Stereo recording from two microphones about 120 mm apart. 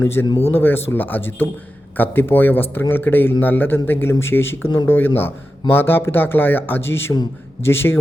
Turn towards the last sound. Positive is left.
turn(degrees=20)  # may be behind; listen again after turning